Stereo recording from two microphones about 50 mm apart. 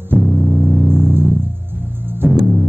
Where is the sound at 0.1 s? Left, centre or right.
Left.